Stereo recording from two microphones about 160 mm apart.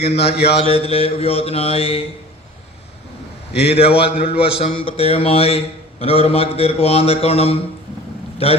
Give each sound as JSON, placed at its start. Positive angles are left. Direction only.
{"t": 0.5, "sound": "a man's voice", "side_deg": 40}
{"t": 3.5, "sound": "a man's voice", "side_deg": 40}